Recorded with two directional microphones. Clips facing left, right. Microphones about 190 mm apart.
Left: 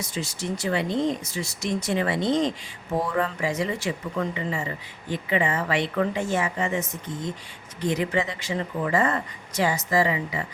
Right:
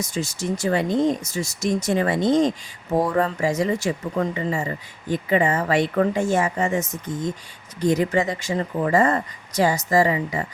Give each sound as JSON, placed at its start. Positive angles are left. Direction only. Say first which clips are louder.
{"t": 0.0, "sound": "speech", "louder": "right 4 dB", "side_deg": -45}